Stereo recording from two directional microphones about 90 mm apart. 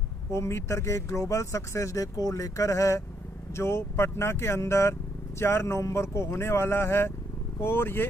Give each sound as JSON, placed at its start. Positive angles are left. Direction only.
{"t": 0.3, "sound": "speech", "side_deg": 30}